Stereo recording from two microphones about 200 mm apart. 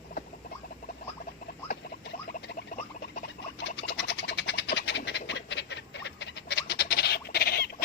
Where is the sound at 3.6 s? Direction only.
60° left (ahead or behind).